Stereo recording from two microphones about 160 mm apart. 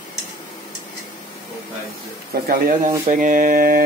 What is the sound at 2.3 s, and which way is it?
Speech, 65° right (ahead or behind).